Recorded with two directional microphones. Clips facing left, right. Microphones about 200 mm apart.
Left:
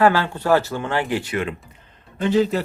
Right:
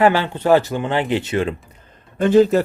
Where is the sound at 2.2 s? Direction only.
50° right (ahead or behind).